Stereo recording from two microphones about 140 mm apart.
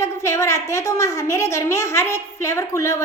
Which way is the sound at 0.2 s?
20° left (ahead or behind).